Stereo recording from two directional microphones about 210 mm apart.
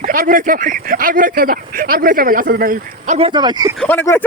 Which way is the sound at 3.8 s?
10° left (ahead or behind).